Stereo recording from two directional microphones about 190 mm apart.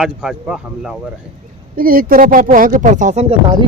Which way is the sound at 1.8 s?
50° right (ahead or behind).